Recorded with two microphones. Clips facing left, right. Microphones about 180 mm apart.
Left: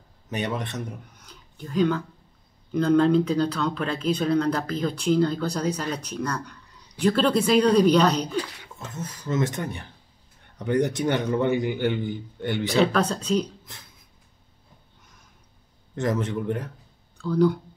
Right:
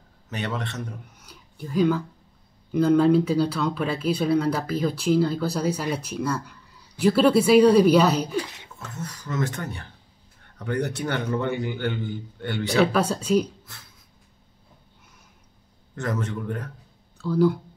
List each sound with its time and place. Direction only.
0.3 s a man's voice: 15° left (ahead or behind)
1.1 s a sound: 5° right (ahead or behind)
2.7 s speech: 5° right (ahead or behind)
8.7 s a man's voice: 20° left (ahead or behind)
12.8 s speech: 10° right (ahead or behind)
15.9 s speech: 15° left (ahead or behind)
17.2 s speech: 5° right (ahead or behind)